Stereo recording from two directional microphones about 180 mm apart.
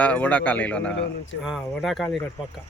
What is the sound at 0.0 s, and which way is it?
Speech, 10° left (ahead or behind).